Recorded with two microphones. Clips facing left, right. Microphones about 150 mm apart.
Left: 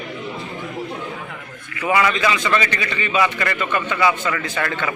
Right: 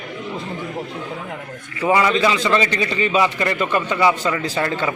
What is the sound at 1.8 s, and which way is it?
A man's voice, 30° right (ahead or behind).